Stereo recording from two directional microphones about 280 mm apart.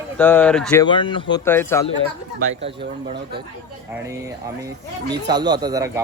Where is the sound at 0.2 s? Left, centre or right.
Centre.